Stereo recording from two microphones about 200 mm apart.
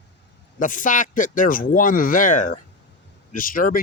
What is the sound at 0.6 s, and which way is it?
Speech, 40° left (ahead or behind).